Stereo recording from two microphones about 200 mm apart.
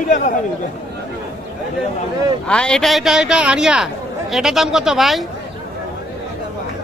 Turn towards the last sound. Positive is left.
turn(degrees=0)  # may be behind; listen again after turning